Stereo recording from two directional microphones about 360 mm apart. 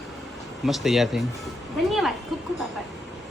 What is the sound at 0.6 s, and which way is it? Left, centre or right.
Speech, centre.